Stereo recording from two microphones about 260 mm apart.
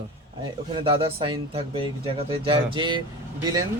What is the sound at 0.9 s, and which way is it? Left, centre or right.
Speech, right.